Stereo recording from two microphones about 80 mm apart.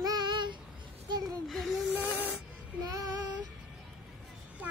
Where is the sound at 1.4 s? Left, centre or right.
Centre.